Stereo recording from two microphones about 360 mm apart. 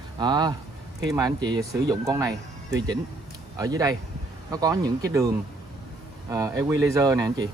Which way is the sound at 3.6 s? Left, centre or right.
Centre.